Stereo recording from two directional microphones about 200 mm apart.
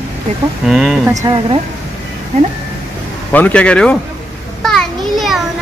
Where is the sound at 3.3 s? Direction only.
5° left (ahead or behind).